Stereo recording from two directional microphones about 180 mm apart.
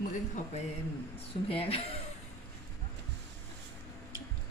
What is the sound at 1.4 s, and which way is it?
Speech, 30° left (ahead or behind).